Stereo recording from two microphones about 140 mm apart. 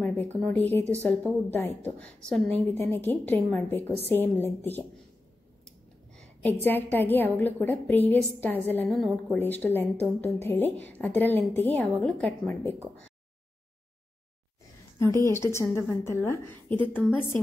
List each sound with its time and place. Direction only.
0.0 s a woman's voice: 10° left (ahead or behind)
5.7 s a woman's voice: 10° left (ahead or behind)
15.0 s a woman's voice: 20° left (ahead or behind)